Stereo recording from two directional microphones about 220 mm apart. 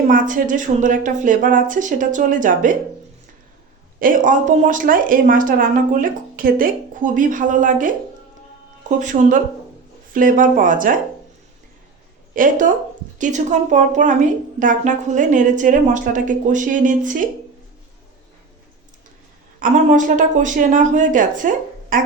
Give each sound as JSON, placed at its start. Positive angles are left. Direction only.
{"t": 0.1, "sound": "speech", "side_deg": -35}
{"t": 4.0, "sound": "speech", "side_deg": -35}
{"t": 12.3, "sound": "speech", "side_deg": -35}
{"t": 19.5, "sound": "speech", "side_deg": -35}